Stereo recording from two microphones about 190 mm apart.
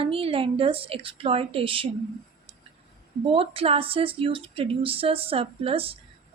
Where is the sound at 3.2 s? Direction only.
30° right (ahead or behind).